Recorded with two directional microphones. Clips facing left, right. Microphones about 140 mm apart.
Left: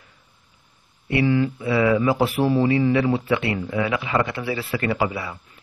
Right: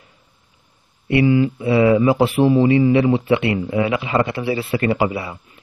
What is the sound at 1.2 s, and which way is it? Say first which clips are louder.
Speech: right 4 dB; 15° right (ahead or behind).